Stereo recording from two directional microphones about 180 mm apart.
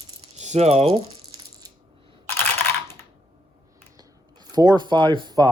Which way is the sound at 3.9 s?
25° right (ahead or behind).